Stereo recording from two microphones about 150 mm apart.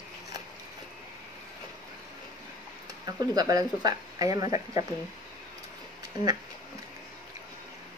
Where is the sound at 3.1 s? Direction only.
25° right (ahead or behind).